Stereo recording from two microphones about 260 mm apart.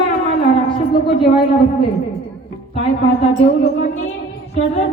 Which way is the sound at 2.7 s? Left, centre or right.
Left.